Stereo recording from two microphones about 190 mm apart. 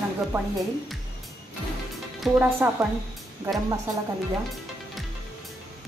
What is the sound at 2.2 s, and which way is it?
Speech, 10° right (ahead or behind).